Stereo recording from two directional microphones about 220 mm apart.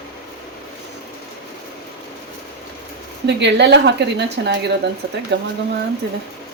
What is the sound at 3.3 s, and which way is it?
Speech, 50° right (ahead or behind).